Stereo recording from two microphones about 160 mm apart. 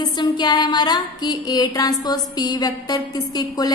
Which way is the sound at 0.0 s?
30° left (ahead or behind).